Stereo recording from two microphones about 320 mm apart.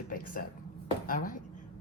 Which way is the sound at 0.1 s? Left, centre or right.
Left.